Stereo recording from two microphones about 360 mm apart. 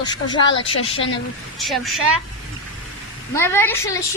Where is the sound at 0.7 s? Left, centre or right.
Left.